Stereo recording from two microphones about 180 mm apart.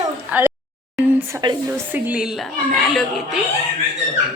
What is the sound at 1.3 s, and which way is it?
Speech, 20° right (ahead or behind).